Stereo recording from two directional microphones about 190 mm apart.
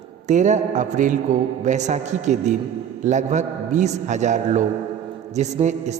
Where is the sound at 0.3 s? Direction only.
40° right (ahead or behind).